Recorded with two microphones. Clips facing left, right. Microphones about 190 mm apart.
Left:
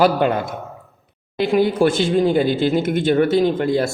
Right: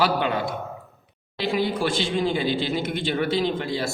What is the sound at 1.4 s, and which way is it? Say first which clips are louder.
Speech: left 8 dB; 50° left (ahead or behind).